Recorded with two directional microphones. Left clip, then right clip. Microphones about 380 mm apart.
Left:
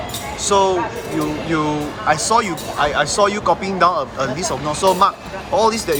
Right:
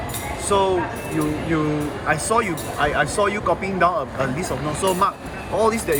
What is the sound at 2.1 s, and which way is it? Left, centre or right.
Speech, centre.